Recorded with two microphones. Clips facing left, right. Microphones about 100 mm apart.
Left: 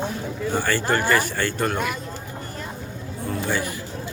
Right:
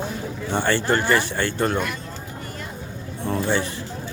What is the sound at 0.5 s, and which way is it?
Speech, 20° right (ahead or behind).